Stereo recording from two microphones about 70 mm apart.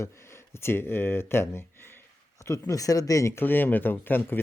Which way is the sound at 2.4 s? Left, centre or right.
Left.